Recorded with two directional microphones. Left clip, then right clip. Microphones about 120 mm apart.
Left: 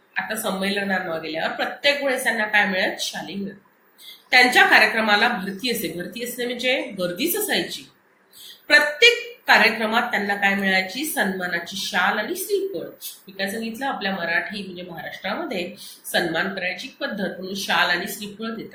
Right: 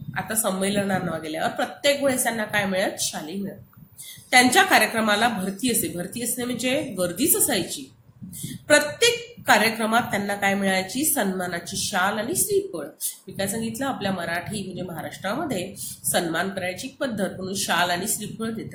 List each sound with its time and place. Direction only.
0.1 s a woman's voice: 50° right (ahead or behind)
8.6 s a woman's voice: 45° right (ahead or behind)
13.3 s a woman's voice: 50° right (ahead or behind)